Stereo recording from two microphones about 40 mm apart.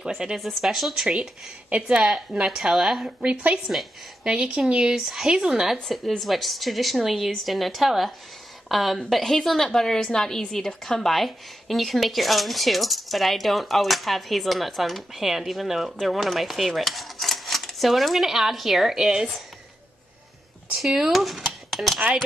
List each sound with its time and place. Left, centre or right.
0.2 s speech: right
0.6 s speech: centre; by 2.0 s right
2.3 s speech: centre
3.2 s speech: right
4.6 s speech: right
4.9 s speech: centre
5.9 s a woman's voice: centre
11.1 s speech: centre
20.8 s speech: centre